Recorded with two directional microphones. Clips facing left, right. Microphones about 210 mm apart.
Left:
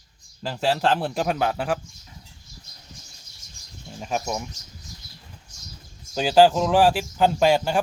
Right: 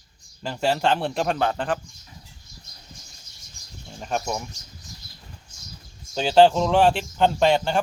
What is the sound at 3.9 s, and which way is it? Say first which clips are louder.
Speech: even; 5° left (ahead or behind).